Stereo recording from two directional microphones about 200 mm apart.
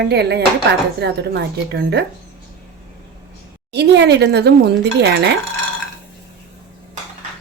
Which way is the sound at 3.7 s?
55° right (ahead or behind).